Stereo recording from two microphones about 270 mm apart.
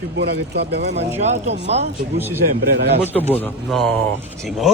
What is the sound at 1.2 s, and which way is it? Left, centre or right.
Speech, right.